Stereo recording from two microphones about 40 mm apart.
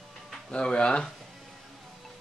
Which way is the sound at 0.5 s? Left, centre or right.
Left.